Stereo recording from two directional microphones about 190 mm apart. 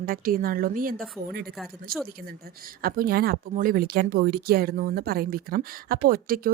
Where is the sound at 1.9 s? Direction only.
50° right (ahead or behind).